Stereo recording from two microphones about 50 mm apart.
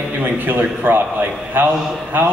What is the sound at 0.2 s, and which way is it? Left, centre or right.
Speech, right.